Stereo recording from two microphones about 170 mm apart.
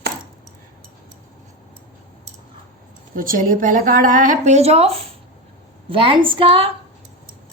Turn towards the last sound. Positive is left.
turn(degrees=-30)  # may be behind; listen again after turning